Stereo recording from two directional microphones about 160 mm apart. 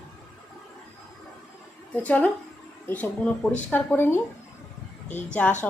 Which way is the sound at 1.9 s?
10° left (ahead or behind).